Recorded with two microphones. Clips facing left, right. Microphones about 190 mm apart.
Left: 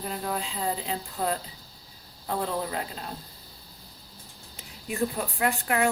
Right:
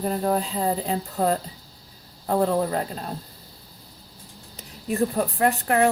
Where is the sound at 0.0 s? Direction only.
40° right (ahead or behind).